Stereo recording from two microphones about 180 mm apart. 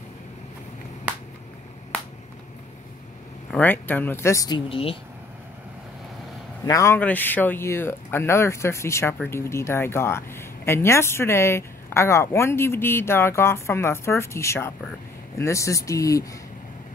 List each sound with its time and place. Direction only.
3.5 s speech: 10° left (ahead or behind); by 4.9 s 30° left (ahead or behind)
6.6 s speech: 15° left (ahead or behind)